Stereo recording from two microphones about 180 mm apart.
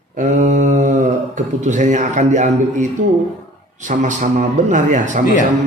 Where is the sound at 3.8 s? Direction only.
45° right (ahead or behind).